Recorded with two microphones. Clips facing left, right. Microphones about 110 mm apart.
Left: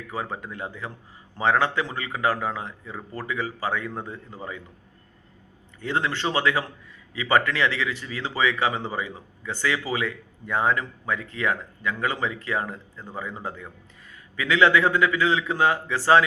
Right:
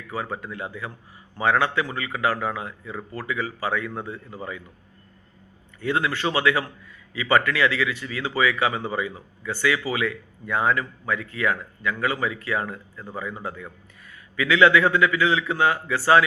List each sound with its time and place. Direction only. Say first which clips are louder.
0.1 s a man's voice: right 2 dB; 20° left (ahead or behind)
5.8 s a man's voice: right 2 dB; 25° left (ahead or behind)
14.3 s a man's voice: right 2 dB; 20° left (ahead or behind)